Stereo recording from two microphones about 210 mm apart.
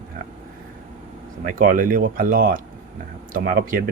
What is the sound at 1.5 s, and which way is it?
Speech, 40° right (ahead or behind).